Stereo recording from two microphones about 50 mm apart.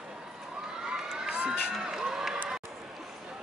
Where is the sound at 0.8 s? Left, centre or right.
Centre.